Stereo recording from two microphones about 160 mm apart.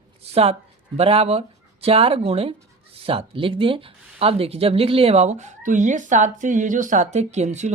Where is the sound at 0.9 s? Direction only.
40° right (ahead or behind).